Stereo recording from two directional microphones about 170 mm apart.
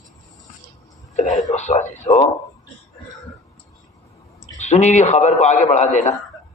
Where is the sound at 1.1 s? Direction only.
45° left (ahead or behind).